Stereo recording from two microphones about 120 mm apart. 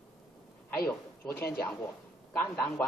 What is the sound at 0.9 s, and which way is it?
Speech, 15° left (ahead or behind).